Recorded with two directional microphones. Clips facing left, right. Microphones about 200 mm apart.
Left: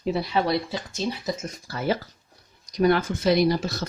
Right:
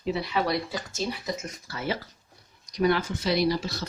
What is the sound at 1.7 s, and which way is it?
Speech, 40° left (ahead or behind).